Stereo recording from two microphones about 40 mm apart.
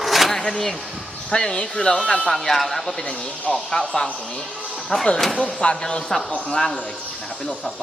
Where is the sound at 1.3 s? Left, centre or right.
Left.